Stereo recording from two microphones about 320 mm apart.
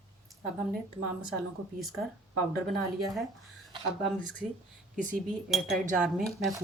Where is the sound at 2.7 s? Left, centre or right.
Centre.